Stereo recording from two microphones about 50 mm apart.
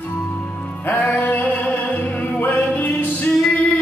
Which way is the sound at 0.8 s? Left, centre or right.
Left.